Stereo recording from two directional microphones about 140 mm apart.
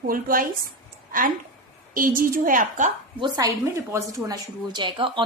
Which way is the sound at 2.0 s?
85° right.